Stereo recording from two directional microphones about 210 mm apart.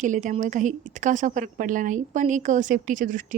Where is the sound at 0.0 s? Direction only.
35° right (ahead or behind).